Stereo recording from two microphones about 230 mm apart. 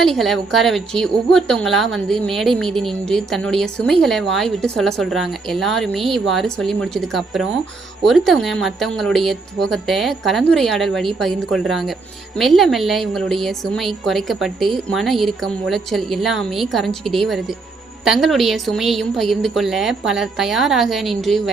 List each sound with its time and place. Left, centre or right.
0.0 s a woman's voice: centre